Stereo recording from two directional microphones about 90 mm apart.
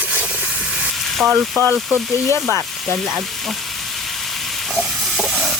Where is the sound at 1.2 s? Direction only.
15° right (ahead or behind).